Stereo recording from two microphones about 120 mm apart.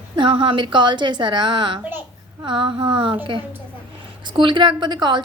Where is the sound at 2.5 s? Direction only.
40° right (ahead or behind).